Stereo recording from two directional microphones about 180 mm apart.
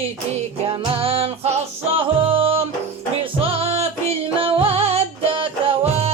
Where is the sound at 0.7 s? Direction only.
30° right (ahead or behind).